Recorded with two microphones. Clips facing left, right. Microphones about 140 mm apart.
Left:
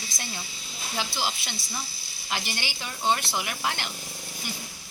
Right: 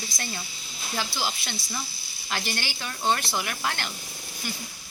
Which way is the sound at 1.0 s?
15° left (ahead or behind).